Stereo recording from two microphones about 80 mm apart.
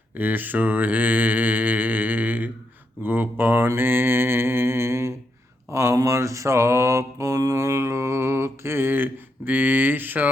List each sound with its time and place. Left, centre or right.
0.2 s mantra: right
3.0 s speech: right
3.8 s mantra: right
5.7 s speech: right
6.0 s mantra: right